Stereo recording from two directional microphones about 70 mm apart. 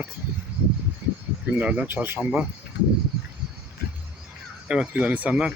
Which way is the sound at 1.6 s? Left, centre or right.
Centre.